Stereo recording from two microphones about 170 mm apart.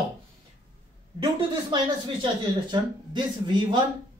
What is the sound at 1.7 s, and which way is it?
Speech, 25° right (ahead or behind).